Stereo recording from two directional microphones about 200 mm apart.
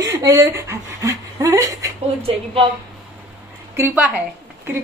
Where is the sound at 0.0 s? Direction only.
15° right (ahead or behind).